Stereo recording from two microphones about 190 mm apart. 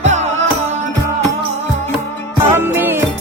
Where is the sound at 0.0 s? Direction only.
35° right (ahead or behind).